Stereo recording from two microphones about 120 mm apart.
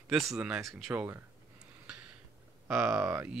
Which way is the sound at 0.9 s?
15° right (ahead or behind).